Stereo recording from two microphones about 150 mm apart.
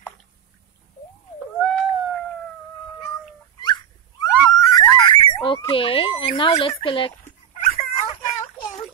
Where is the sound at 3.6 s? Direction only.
30° left (ahead or behind).